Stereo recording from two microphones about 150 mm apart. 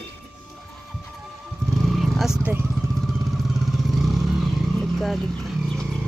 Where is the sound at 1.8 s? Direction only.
Centre (ahead or behind).